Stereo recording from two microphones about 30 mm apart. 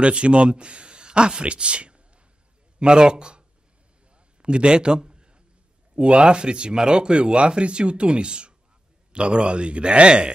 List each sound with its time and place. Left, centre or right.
0.0 s a man's voice: right
4.4 s a sound: right
5.9 s speech: right